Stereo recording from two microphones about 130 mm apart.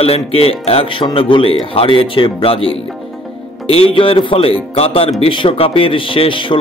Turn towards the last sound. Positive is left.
turn(degrees=40)  # may be behind; listen again after turning